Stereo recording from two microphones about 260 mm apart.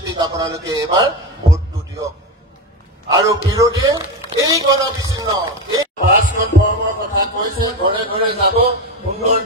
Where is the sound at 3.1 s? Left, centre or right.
Centre.